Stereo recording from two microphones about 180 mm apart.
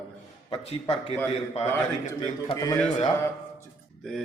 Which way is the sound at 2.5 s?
20° left (ahead or behind).